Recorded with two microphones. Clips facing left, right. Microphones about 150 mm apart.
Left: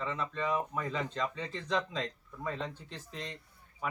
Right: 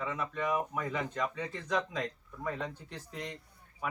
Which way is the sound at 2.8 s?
15° right (ahead or behind).